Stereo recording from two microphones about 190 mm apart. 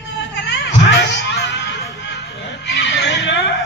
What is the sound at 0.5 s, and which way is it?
Music, 70° left (ahead or behind).